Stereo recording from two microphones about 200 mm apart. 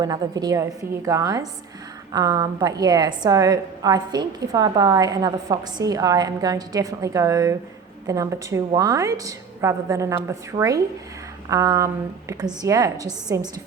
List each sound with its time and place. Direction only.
0.0 s a woman's voice: 20° right (ahead or behind)